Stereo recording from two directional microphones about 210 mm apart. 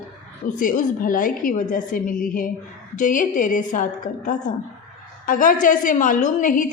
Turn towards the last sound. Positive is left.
turn(degrees=40)  # may be behind; listen again after turning